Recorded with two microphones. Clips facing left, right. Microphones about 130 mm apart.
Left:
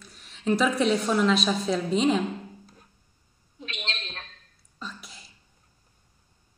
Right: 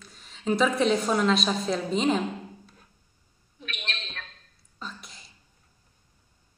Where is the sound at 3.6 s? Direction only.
25° left (ahead or behind).